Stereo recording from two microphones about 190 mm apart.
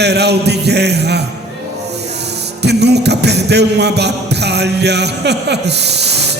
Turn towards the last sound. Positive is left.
turn(degrees=-60)  # may be behind; listen again after turning